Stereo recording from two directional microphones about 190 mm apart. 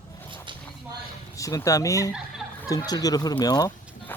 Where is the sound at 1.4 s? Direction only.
15° left (ahead or behind).